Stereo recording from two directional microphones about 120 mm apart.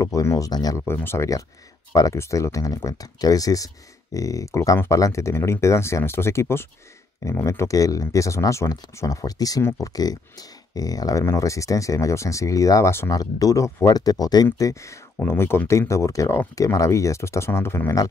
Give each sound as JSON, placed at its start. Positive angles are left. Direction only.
{"t": 0.0, "sound": "speech", "side_deg": 25}
{"t": 0.7, "sound": "speech", "side_deg": 20}